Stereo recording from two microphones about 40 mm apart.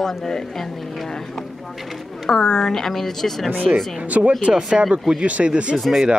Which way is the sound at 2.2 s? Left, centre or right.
Centre.